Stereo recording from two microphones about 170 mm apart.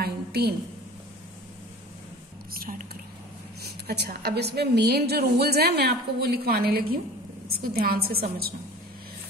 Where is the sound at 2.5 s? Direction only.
55° right (ahead or behind).